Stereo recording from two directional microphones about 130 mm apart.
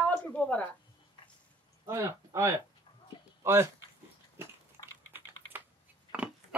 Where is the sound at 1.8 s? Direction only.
20° right (ahead or behind).